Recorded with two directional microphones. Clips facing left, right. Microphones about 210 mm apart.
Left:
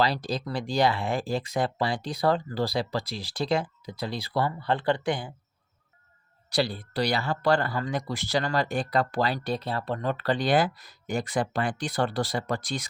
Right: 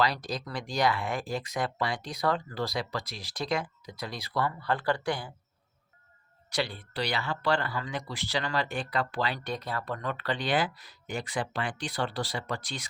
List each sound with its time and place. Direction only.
0.0 s speech: 30° left (ahead or behind)
6.5 s speech: 35° left (ahead or behind)